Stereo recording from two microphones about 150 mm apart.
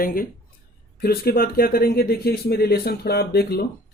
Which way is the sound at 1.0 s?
90° left.